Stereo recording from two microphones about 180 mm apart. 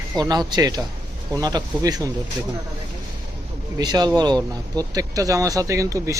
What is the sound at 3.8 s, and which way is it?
Speech, 20° right (ahead or behind).